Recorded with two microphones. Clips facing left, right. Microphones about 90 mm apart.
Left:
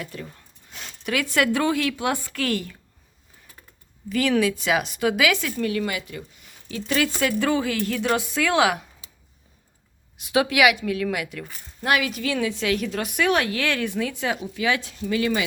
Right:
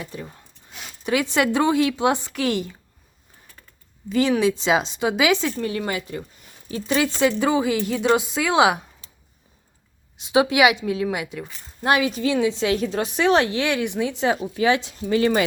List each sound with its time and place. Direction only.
0.0 s a woman's voice: 20° right (ahead or behind)
0.7 s zipper: 5° right (ahead or behind)
1.0 s a woman's voice: 20° right (ahead or behind)
4.1 s a woman's voice: 25° right (ahead or behind)
10.2 s a woman's voice: 20° right (ahead or behind)